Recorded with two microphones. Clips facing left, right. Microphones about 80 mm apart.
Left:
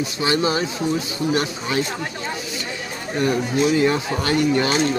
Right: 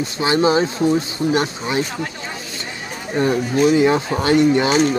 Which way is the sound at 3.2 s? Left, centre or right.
Right.